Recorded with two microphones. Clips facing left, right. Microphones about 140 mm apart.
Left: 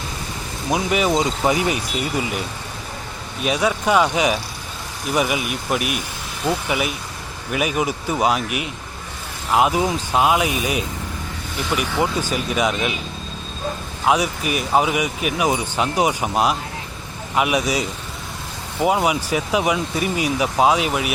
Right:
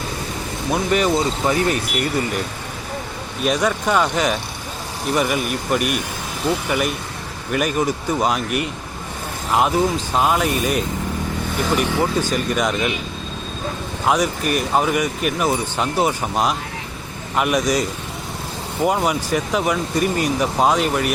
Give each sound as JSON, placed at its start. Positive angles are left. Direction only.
{"t": 0.7, "sound": "speech", "side_deg": 5}
{"t": 3.4, "sound": "speech", "side_deg": 5}
{"t": 11.9, "sound": "speech", "side_deg": 10}
{"t": 14.0, "sound": "speech", "side_deg": 5}